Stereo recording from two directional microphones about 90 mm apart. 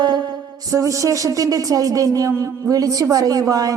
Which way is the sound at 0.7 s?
35° right (ahead or behind).